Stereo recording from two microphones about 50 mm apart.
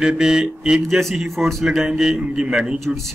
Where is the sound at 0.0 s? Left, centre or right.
Centre.